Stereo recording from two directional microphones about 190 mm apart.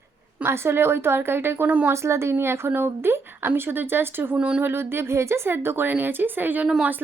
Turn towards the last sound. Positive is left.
turn(degrees=-10)  # may be behind; listen again after turning